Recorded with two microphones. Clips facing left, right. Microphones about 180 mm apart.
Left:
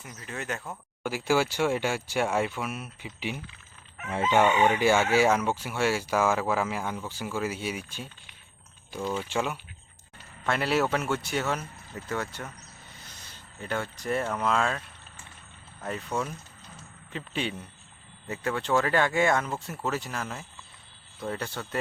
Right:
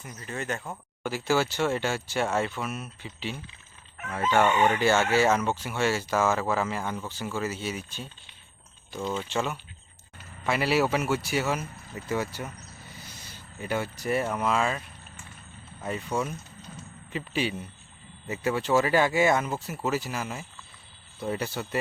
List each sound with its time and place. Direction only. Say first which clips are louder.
0.0 s speech: right 2 dB; 5° left (ahead or behind)
4.1 s chicken: left 1 dB; 20° left (ahead or behind)
4.4 s speech: even; 5° left (ahead or behind)
10.4 s speech: right 1 dB; 5° right (ahead or behind)